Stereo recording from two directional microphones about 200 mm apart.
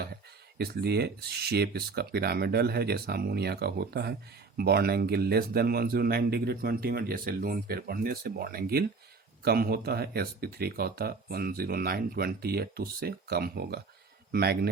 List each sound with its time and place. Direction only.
0.6 s speech: 50° right (ahead or behind)